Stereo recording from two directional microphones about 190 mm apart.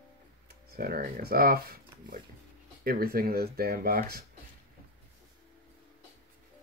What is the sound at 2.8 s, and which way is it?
Speech, 50° right (ahead or behind).